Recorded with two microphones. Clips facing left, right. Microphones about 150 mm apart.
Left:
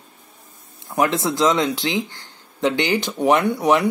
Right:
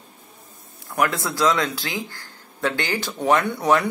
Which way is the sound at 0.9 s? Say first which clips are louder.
Left 3 dB; 20° left (ahead or behind).